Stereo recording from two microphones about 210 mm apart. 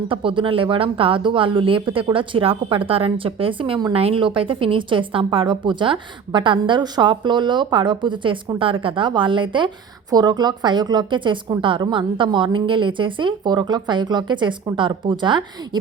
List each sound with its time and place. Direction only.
0.1 s speech: 25° right (ahead or behind)